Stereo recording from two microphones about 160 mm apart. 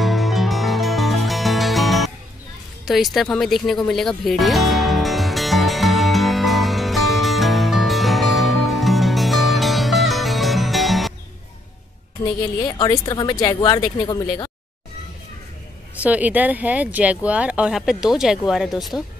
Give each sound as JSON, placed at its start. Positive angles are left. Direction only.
{"t": 0.0, "sound": "music", "side_deg": 0}
{"t": 12.5, "sound": "speech", "side_deg": 25}
{"t": 16.0, "sound": "speech", "side_deg": -10}